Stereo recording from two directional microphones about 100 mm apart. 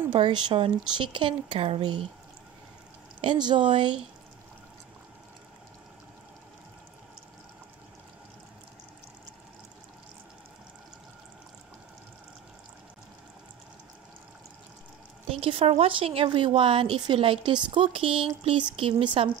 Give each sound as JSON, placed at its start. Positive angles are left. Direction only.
{"t": 0.1, "sound": "speech", "side_deg": -50}
{"t": 3.2, "sound": "speech", "side_deg": -50}
{"t": 15.2, "sound": "a woman's voice", "side_deg": -75}